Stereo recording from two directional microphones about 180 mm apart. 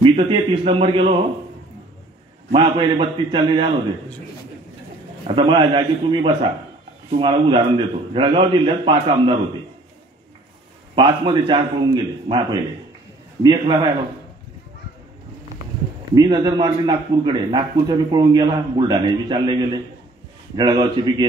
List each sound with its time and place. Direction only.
0.0 s a man's voice: 35° right (ahead or behind)
2.5 s a man's voice: 30° right (ahead or behind)
5.2 s a man's voice: 30° right (ahead or behind)
11.0 s a man's voice: 25° right (ahead or behind)
16.2 s a man's voice: 20° right (ahead or behind)